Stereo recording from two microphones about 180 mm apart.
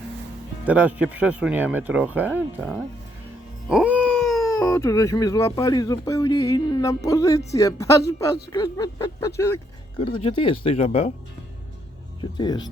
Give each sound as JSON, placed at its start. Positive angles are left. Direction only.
{"t": 0.6, "sound": "speech", "side_deg": -10}
{"t": 2.3, "sound": "speech", "side_deg": 0}
{"t": 4.0, "sound": "cat", "side_deg": 5}
{"t": 4.6, "sound": "speech", "side_deg": 15}
{"t": 8.5, "sound": "a sound", "side_deg": 20}
{"t": 10.1, "sound": "speech", "side_deg": 30}
{"t": 12.2, "sound": "speech", "side_deg": 25}